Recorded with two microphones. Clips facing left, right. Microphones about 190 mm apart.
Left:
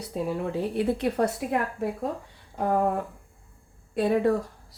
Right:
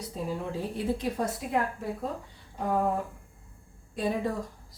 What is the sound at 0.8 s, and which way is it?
Speech, 65° left (ahead or behind).